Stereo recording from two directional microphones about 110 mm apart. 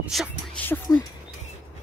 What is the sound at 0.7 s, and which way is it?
Speech, 15° left (ahead or behind).